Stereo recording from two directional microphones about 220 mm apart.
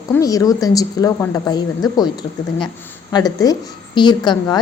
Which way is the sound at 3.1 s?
15° left (ahead or behind).